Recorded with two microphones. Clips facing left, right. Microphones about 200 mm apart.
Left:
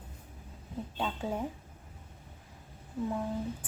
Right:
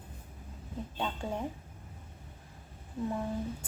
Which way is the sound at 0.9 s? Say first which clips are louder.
Left 1 dB; 5° left (ahead or behind).